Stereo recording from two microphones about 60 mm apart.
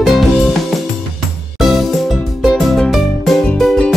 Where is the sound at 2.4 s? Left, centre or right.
Centre.